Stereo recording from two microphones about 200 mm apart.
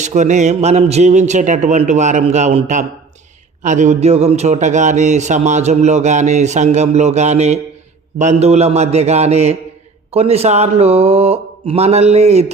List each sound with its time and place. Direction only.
0.0 s speech: 35° right (ahead or behind)